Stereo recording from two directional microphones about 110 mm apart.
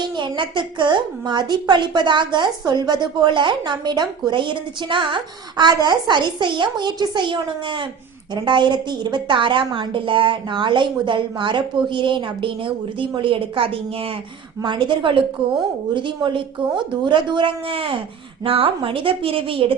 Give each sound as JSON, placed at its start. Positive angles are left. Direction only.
{"t": 0.0, "sound": "a woman's voice", "side_deg": -45}
{"t": 14.6, "sound": "a woman's voice", "side_deg": -45}